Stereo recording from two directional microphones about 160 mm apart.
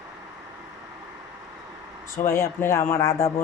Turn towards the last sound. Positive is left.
turn(degrees=15)  # may be behind; listen again after turning